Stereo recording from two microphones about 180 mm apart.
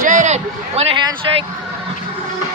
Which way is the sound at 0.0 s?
45° right (ahead or behind).